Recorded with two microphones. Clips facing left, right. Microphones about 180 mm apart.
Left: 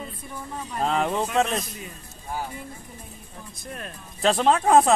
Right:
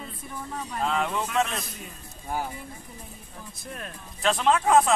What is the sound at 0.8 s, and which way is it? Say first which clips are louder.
Speech: left 4 dB; 35° left (ahead or behind).